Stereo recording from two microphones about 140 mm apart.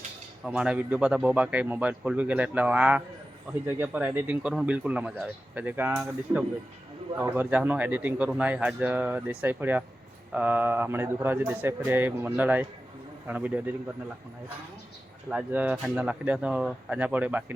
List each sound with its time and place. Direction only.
0.4 s speech: 5° right (ahead or behind)
15.3 s speech: 10° right (ahead or behind)